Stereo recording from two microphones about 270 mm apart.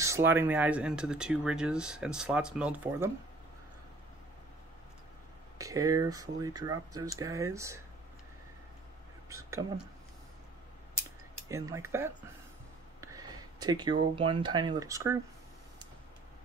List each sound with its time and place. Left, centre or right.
0.0 s speech: centre
5.6 s speech: centre
9.3 s speech: centre
11.4 s speech: centre
13.0 s a sound: centre
14.1 s speech: centre